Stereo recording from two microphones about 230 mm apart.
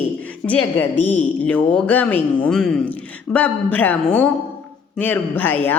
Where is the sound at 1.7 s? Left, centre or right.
Centre.